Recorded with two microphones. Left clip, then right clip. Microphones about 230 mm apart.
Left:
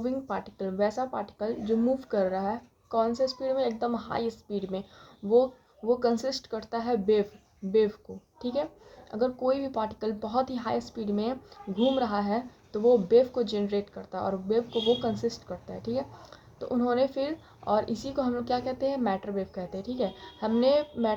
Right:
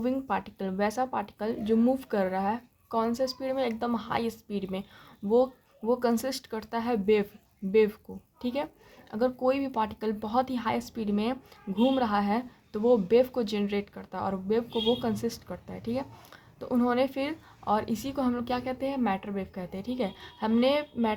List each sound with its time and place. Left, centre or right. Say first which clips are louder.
0.0 s speech: right 2 dB; right
5.9 s speech: left 1 dB; right